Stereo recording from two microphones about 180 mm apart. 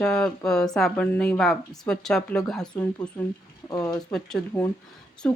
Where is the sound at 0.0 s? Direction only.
5° left (ahead or behind).